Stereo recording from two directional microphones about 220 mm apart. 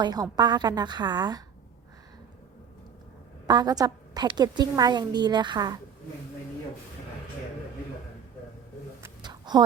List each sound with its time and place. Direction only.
0.0 s a woman's voice: 20° right (ahead or behind)
3.4 s a woman's voice: 15° right (ahead or behind)
9.0 s a sound: 20° right (ahead or behind)